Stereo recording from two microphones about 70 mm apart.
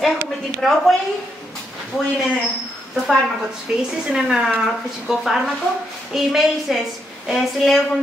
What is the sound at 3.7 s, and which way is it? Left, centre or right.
A woman's voice, centre.